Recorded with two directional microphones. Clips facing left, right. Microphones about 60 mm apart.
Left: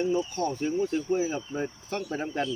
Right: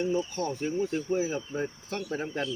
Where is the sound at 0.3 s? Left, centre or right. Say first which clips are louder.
Left 2 dB; centre.